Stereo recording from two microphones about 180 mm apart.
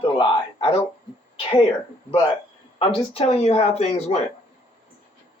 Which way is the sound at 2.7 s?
30° left (ahead or behind).